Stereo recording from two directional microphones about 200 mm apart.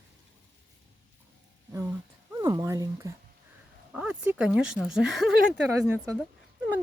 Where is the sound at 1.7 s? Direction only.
15° right (ahead or behind).